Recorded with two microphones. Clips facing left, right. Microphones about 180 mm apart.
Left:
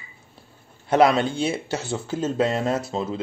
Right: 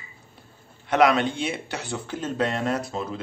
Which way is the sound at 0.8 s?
30° left (ahead or behind).